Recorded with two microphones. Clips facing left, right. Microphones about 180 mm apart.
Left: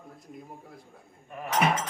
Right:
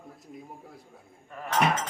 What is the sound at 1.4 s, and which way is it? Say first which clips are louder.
Speech: left 1 dB; 20° left (ahead or behind).